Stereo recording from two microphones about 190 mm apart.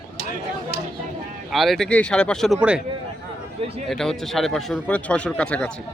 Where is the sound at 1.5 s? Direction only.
Centre (ahead or behind).